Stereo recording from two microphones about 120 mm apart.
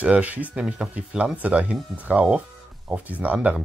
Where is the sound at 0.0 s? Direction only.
10° right (ahead or behind).